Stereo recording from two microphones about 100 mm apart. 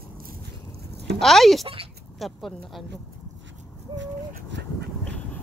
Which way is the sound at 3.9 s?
50° right (ahead or behind).